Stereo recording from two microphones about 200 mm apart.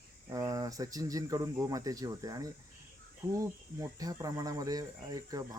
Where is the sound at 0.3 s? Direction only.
15° right (ahead or behind).